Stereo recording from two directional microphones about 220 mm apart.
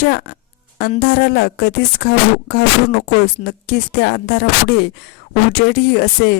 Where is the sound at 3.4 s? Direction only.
50° left (ahead or behind).